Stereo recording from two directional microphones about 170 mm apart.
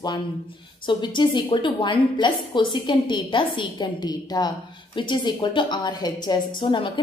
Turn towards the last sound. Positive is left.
turn(degrees=30)  # may be behind; listen again after turning